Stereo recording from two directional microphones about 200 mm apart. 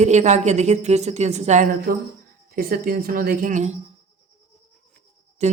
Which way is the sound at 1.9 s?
45° right (ahead or behind).